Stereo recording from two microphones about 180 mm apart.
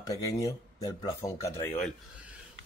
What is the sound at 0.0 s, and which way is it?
Speech, 20° left (ahead or behind).